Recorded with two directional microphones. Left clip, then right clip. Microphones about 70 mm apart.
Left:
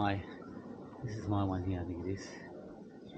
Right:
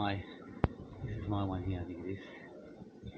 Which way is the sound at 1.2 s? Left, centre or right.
Centre.